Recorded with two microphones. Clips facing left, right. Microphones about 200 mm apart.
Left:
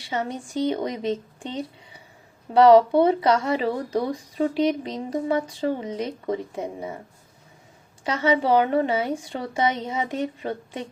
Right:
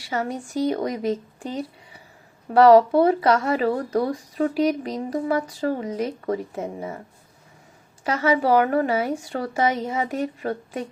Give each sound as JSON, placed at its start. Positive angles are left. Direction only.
{"t": 0.0, "sound": "a woman's voice", "side_deg": 20}
{"t": 1.4, "sound": "a sound", "side_deg": 20}
{"t": 2.5, "sound": "a woman's voice", "side_deg": 20}
{"t": 8.0, "sound": "a woman's voice", "side_deg": 20}